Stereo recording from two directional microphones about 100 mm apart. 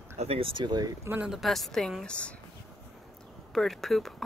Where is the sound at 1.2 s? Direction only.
Centre (ahead or behind).